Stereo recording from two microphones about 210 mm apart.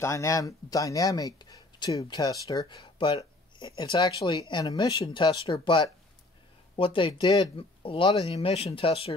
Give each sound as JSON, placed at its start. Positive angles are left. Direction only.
{"t": 0.0, "sound": "speech", "side_deg": 15}